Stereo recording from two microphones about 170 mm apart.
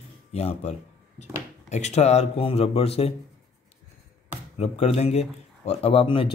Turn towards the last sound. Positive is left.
turn(degrees=30)  # may be behind; listen again after turning